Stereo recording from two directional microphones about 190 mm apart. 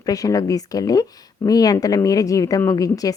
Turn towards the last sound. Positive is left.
turn(degrees=20)  # may be behind; listen again after turning